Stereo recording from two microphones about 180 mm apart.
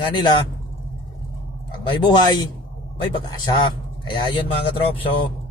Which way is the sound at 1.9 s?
25° left (ahead or behind).